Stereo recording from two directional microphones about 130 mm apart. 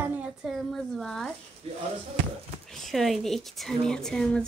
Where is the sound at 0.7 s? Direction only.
Centre (ahead or behind).